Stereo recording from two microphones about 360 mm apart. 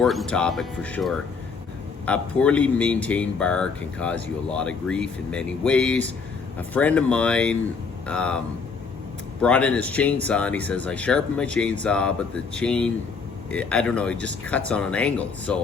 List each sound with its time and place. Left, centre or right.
0.0 s speech: centre
9.4 s speech: centre